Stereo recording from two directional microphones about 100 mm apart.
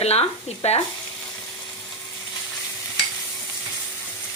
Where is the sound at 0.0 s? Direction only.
90° left.